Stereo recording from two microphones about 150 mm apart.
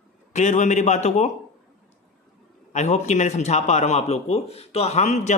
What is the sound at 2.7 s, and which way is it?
Speech, 50° left (ahead or behind).